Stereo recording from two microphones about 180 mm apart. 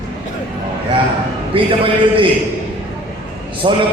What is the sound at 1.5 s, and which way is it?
Speech, 30° right (ahead or behind).